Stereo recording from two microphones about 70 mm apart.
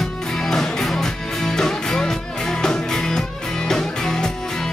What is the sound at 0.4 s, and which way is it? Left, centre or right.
Music, centre.